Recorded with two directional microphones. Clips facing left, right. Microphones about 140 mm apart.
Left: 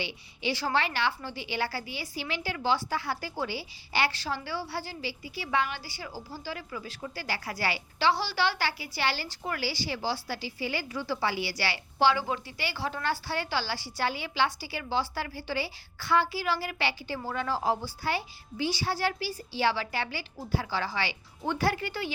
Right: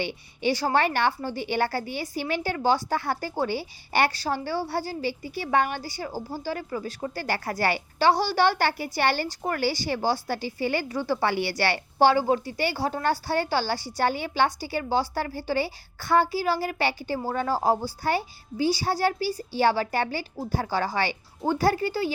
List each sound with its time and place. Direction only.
0.0 s a woman's voice: 50° right (ahead or behind)